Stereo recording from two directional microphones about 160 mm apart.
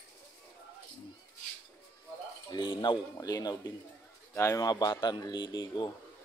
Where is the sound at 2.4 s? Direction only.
30° left (ahead or behind).